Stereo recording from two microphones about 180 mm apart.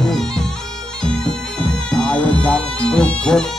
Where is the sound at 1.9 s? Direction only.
5° left (ahead or behind).